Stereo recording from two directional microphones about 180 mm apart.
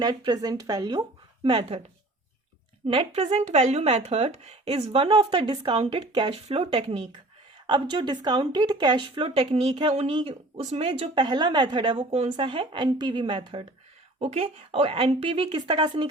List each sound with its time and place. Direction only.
0.0 s a woman's voice: 25° right (ahead or behind)
2.8 s a woman's voice: 30° right (ahead or behind)